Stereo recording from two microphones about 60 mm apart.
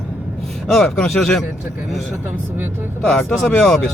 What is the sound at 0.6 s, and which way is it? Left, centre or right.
Speech, centre.